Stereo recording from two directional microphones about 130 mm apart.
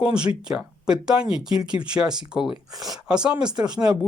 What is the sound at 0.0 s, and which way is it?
Speech, 10° right (ahead or behind).